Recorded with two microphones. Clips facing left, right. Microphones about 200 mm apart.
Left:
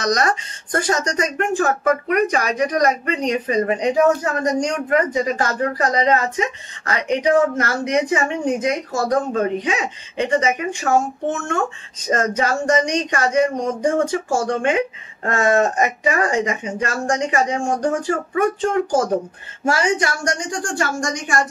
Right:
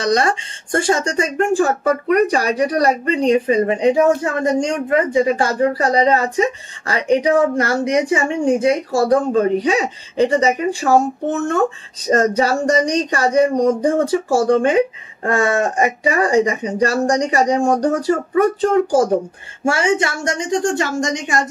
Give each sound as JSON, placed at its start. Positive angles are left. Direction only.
{"t": 0.0, "sound": "a woman's voice", "side_deg": -30}